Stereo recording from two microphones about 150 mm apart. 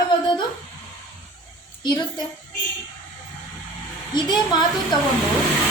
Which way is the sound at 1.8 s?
30° left (ahead or behind).